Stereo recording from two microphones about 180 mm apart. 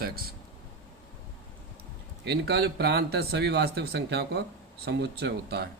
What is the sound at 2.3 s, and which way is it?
Speech, 65° right (ahead or behind).